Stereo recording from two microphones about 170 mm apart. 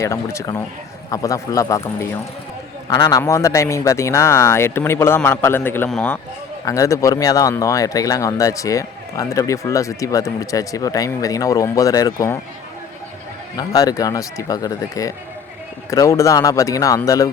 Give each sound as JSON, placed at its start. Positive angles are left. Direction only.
{"t": 0.3, "sound": "speech", "side_deg": 15}
{"t": 6.7, "sound": "speech", "side_deg": 20}
{"t": 13.6, "sound": "speech", "side_deg": 20}